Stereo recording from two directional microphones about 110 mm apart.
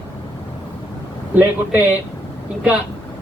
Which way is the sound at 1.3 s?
15° right (ahead or behind).